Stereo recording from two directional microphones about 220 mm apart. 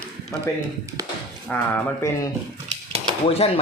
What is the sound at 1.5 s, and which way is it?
Speech, 10° left (ahead or behind).